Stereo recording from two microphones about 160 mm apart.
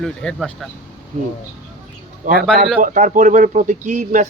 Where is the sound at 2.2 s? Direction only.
55° right (ahead or behind).